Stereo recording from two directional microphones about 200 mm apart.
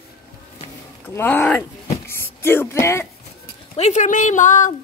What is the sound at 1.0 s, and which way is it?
Speech, 10° left (ahead or behind).